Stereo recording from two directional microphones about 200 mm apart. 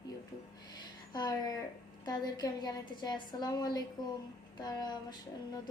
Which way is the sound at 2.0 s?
20° left (ahead or behind).